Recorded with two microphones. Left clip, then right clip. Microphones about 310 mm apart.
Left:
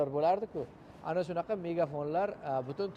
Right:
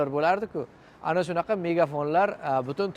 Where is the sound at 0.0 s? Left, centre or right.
Right.